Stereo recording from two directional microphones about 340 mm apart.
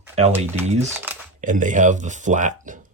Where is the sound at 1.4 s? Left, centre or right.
Right.